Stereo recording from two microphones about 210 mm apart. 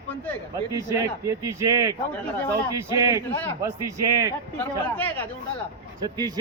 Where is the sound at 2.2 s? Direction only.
10° left (ahead or behind).